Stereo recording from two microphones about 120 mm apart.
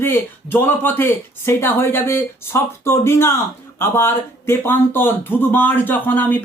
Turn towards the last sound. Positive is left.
turn(degrees=15)  # may be behind; listen again after turning